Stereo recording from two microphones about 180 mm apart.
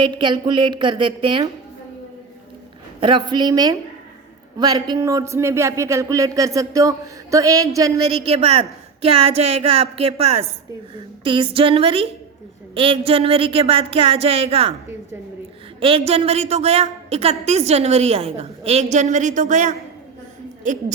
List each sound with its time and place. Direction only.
0.0 s speech: 25° right (ahead or behind)
3.0 s a woman's voice: 25° right (ahead or behind)
15.8 s a woman's voice: 30° right (ahead or behind)